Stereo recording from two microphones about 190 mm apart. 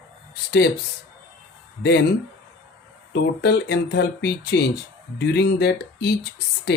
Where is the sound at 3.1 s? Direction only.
60° left (ahead or behind).